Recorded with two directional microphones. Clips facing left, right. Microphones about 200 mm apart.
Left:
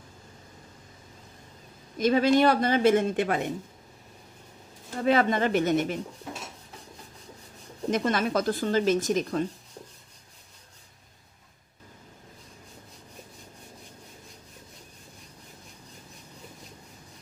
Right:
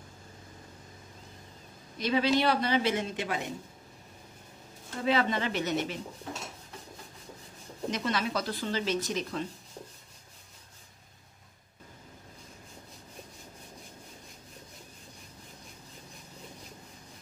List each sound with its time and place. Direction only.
2.0 s a woman's voice: 45° left (ahead or behind)
5.0 s a woman's voice: 50° left (ahead or behind)
7.9 s a woman's voice: 50° left (ahead or behind)